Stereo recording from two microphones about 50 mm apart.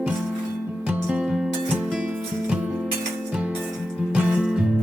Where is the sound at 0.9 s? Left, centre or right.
Centre.